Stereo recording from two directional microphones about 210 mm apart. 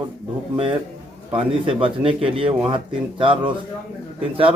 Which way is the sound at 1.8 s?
25° right (ahead or behind).